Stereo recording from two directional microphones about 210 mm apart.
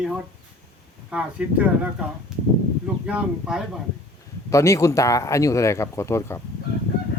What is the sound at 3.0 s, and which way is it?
Speech, 5° right (ahead or behind).